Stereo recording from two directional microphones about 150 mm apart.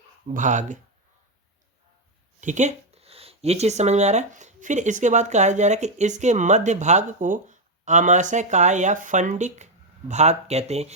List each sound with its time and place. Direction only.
0.3 s speech: 55° right (ahead or behind)
2.4 s speech: 55° right (ahead or behind)